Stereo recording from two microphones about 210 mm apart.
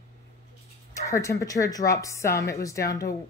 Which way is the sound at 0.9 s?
15° left (ahead or behind).